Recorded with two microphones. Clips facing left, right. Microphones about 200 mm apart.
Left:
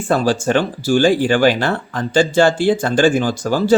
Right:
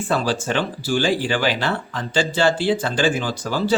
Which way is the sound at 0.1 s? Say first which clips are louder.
Left 7 dB; 45° left (ahead or behind).